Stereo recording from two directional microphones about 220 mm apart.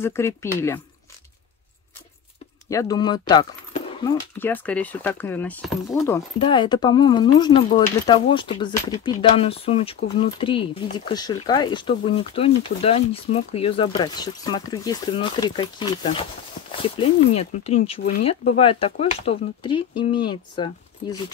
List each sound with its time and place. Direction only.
0.0 s speech: 10° left (ahead or behind)
2.7 s speech: 15° left (ahead or behind)
4.4 s speech: 5° left (ahead or behind)
6.4 s speech: 20° left (ahead or behind)